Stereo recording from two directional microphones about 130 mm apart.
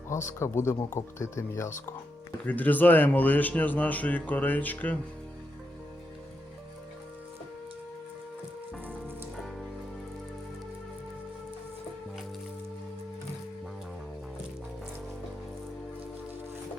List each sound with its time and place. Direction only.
0.1 s a man's voice: 20° left (ahead or behind)